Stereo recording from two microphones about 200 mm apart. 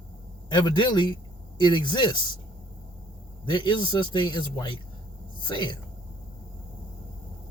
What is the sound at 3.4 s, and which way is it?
A man's voice, 25° left (ahead or behind).